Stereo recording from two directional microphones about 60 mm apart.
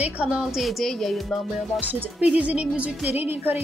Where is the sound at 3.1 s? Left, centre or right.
Right.